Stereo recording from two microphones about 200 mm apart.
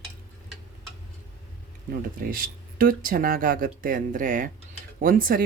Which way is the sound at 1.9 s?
45° right (ahead or behind).